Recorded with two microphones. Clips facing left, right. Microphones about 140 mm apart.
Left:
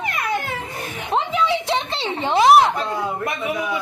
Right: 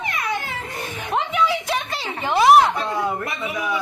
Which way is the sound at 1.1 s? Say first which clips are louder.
Left 1 dB; 25° left (ahead or behind).